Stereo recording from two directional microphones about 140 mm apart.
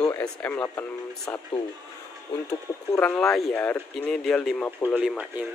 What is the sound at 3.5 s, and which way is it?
Speech, 15° left (ahead or behind).